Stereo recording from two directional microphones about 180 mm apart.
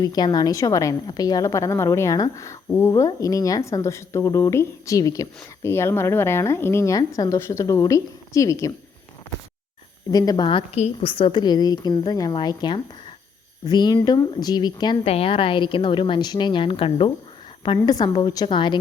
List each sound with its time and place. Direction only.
0.0 s a woman's voice: 20° left (ahead or behind)
10.1 s a woman's voice: 20° left (ahead or behind)